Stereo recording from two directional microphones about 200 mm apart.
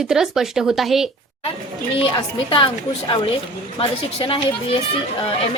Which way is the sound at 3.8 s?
25° left (ahead or behind).